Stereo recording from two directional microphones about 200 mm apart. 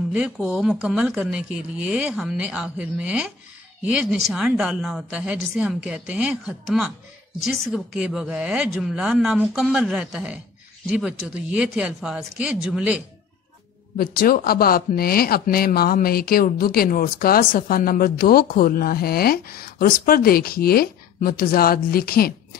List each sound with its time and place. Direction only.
0.1 s speech: 5° right (ahead or behind)
13.9 s speech: 45° left (ahead or behind)